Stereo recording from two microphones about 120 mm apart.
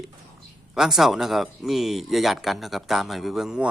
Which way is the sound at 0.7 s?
Centre (ahead or behind).